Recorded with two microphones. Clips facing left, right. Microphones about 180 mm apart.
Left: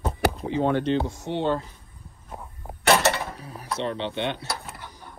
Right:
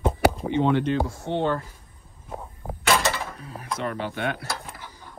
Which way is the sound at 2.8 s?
60° left (ahead or behind).